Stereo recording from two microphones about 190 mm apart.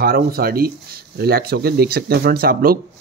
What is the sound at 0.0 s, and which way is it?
Speech, 55° right (ahead or behind).